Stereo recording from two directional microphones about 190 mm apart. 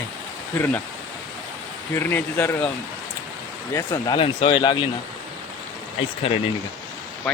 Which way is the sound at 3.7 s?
15° left (ahead or behind).